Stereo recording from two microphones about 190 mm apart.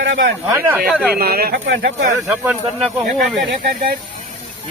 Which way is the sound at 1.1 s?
55° right (ahead or behind).